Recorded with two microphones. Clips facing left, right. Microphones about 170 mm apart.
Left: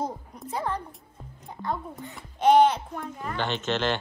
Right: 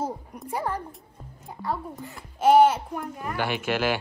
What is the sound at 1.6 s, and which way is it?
Speech, 5° right (ahead or behind).